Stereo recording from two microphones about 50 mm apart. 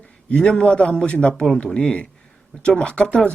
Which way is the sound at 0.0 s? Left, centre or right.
Left.